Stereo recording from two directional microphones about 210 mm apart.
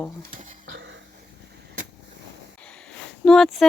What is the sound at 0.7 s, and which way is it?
Cough, 60° right (ahead or behind).